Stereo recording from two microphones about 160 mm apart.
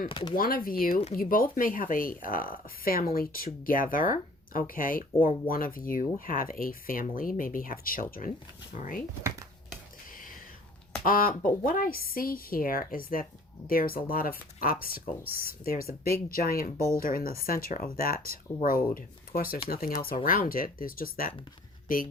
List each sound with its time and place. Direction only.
0.1 s speech: 30° left (ahead or behind)
0.3 s a woman's voice: 65° left (ahead or behind)
10.1 s a sound: 60° left (ahead or behind)
11.0 s a woman's voice: 65° left (ahead or behind)